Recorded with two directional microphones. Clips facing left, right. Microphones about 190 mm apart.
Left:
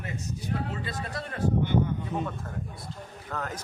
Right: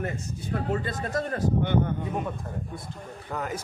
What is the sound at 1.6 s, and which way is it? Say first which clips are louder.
Speech: even; 60° right (ahead or behind).